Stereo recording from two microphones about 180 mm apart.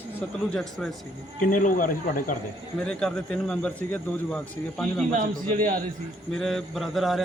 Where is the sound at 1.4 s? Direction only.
45° left (ahead or behind).